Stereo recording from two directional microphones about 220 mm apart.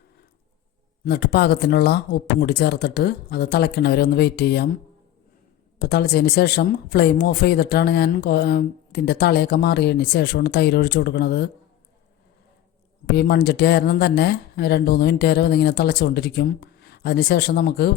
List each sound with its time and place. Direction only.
1.0 s speech: 45° left (ahead or behind)
5.8 s speech: 45° left (ahead or behind)
13.1 s speech: 45° left (ahead or behind)